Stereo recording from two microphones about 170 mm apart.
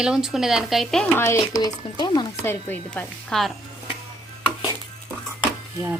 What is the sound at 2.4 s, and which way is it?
Speech, 15° left (ahead or behind).